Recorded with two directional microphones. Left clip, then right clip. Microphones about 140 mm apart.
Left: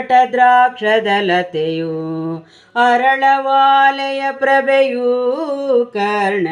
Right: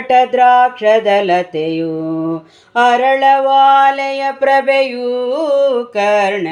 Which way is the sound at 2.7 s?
5° right (ahead or behind).